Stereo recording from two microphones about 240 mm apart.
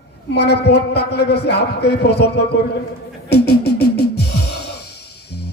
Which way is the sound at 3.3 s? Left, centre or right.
Left.